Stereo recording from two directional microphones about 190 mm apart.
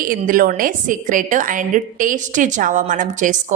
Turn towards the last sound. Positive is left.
turn(degrees=-40)  # may be behind; listen again after turning